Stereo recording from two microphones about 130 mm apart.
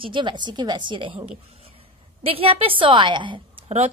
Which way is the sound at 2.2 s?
45° right (ahead or behind).